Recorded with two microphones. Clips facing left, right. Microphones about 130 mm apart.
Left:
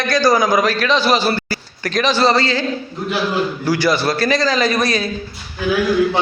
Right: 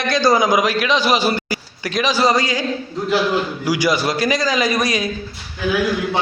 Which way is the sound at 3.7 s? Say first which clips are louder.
Left 1 dB; 15° right (ahead or behind).